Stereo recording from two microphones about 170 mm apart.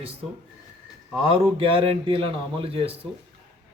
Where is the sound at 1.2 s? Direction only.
35° right (ahead or behind).